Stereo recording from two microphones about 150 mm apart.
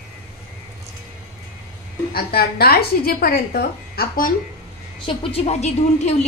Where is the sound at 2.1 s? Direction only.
90° left.